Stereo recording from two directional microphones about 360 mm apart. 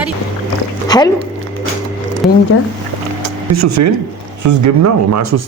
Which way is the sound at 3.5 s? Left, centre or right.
Right.